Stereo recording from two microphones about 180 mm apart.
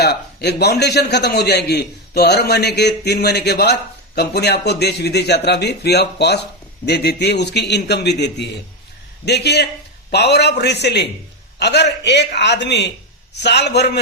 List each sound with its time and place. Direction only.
0.0 s a man's voice: 65° left (ahead or behind)